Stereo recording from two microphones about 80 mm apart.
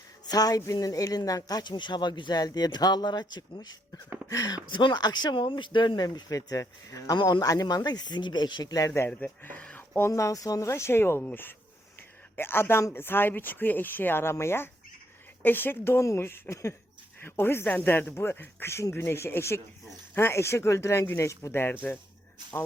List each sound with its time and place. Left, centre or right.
0.3 s speech: left
4.7 s speech: left
7.2 s speech: left
9.0 s speech: left
10.1 s speech: left
11.2 s speech: left